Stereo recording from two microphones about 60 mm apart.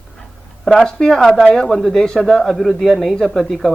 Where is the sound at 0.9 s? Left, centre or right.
Centre.